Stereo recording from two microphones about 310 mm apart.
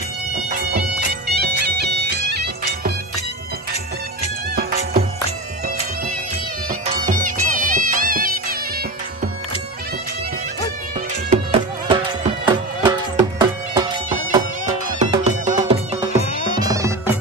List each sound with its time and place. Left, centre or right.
0.5 s bagpipes: right
1.8 s music: right
4.6 s music: right
6.7 s music: right
11.2 s music: centre
14.9 s music: right